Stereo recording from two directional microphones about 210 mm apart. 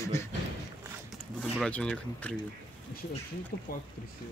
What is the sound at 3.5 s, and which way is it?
Speech, 45° left (ahead or behind).